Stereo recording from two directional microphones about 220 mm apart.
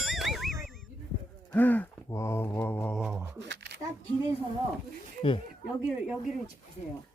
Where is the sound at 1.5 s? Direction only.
10° left (ahead or behind).